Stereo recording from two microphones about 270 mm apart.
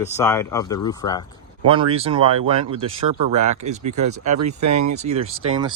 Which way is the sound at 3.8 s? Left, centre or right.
Right.